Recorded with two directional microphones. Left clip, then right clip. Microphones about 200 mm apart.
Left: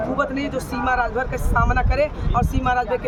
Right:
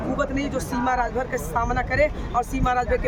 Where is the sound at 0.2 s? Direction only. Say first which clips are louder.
Left 2 dB; centre (ahead or behind).